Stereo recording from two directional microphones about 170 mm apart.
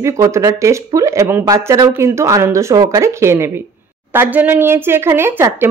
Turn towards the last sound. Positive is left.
turn(degrees=-15)  # may be behind; listen again after turning